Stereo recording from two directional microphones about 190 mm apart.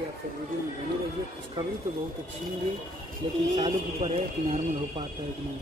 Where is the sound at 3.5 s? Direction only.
35° right (ahead or behind).